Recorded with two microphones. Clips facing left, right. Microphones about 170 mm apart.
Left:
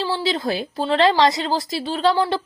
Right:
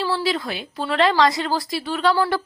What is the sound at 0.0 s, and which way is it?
A woman's voice, 25° left (ahead or behind).